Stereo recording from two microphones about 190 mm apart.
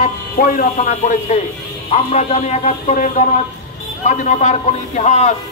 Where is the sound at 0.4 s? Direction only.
45° left (ahead or behind).